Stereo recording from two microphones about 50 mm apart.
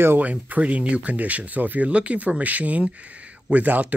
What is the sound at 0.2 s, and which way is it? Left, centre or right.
Speech, right.